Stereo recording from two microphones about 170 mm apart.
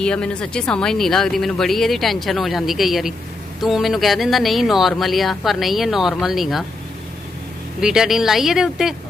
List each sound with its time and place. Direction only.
0.0 s speech: 5° left (ahead or behind)
7.8 s speech: 5° right (ahead or behind)